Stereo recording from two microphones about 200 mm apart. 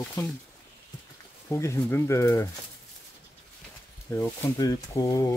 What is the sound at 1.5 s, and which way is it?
Speech, 15° left (ahead or behind).